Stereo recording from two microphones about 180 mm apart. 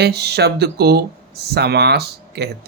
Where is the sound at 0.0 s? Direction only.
65° right (ahead or behind).